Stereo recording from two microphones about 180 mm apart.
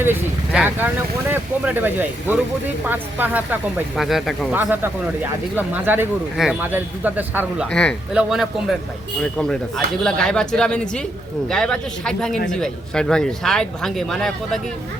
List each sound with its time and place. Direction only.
0.0 s speech: 10° right (ahead or behind)
7.7 s speech: 5° left (ahead or behind)